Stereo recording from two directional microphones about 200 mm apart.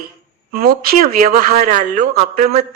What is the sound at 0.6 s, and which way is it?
A woman's voice, 45° right (ahead or behind).